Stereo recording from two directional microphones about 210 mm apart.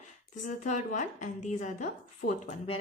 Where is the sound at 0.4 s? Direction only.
35° left (ahead or behind).